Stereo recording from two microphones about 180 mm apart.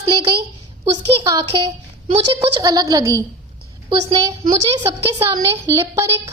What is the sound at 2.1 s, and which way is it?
A woman's voice, 30° right (ahead or behind).